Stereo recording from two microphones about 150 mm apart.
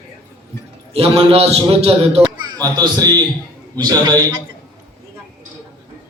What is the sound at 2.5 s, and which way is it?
A man's voice, 30° right (ahead or behind).